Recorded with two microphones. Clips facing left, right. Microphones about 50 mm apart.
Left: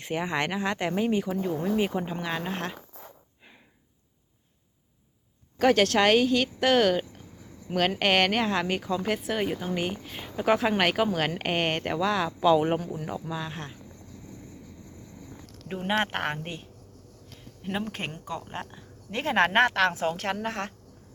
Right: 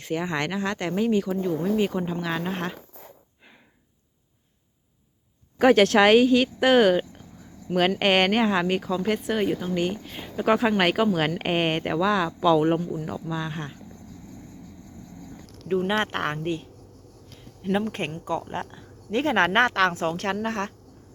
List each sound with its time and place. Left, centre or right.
0.0 s speech: centre
5.5 s speech: right; by 13.8 s centre
15.6 s speech: centre
17.6 s speech: centre